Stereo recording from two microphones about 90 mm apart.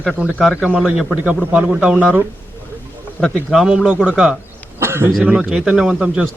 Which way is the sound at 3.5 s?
5° right (ahead or behind).